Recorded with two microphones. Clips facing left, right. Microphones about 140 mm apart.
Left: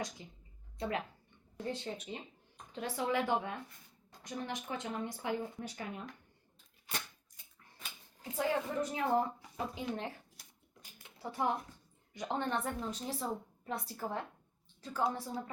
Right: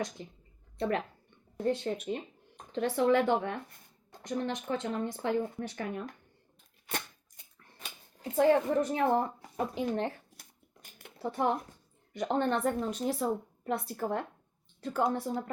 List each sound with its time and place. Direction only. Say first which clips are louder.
0.2 s speech: right 7 dB; 60° right (ahead or behind)
8.2 s speech: right 9 dB; 55° right (ahead or behind)
10.9 s a sound: right 5 dB; 60° right (ahead or behind)
12.1 s speech: right 6 dB; 60° right (ahead or behind)